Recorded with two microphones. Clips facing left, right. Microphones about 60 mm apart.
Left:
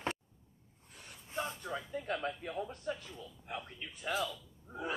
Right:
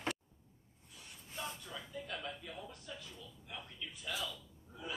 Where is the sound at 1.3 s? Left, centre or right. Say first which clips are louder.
Left 7 dB; left.